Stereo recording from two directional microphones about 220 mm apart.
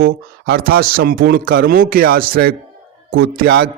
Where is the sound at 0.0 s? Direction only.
45° right (ahead or behind).